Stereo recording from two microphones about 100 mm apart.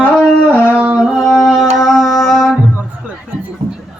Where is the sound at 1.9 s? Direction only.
Centre (ahead or behind).